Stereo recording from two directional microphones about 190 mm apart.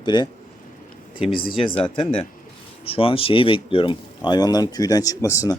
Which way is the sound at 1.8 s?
30° left (ahead or behind).